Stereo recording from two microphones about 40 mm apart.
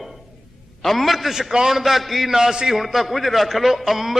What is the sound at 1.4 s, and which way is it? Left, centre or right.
A man's voice, centre.